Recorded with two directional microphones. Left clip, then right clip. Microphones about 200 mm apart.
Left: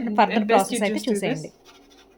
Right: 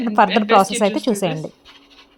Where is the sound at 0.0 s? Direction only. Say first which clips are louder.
Right 5 dB; 25° right (ahead or behind).